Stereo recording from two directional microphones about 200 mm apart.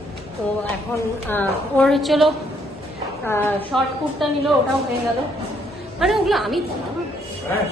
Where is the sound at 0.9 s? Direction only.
10° left (ahead or behind).